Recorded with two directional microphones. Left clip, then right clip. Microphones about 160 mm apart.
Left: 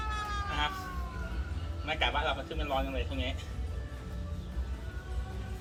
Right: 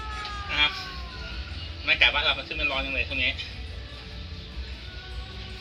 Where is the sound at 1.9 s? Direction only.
20° left (ahead or behind).